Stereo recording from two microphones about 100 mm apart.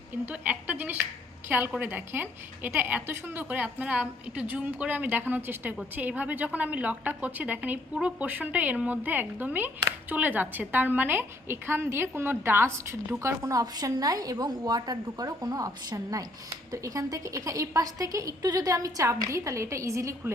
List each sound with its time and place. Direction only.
0.1 s a woman's voice: 15° right (ahead or behind)